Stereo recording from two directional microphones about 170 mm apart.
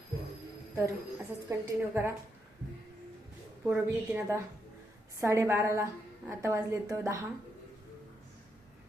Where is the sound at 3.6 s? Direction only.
15° right (ahead or behind).